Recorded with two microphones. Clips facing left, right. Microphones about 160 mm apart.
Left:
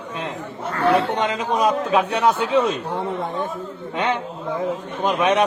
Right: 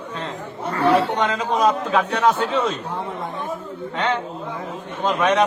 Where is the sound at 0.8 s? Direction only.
20° right (ahead or behind).